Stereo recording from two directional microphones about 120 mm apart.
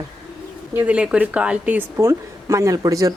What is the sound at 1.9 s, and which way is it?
Speech, 25° right (ahead or behind).